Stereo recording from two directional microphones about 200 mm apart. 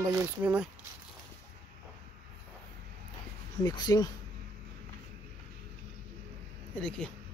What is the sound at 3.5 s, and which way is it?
Speech, 20° left (ahead or behind).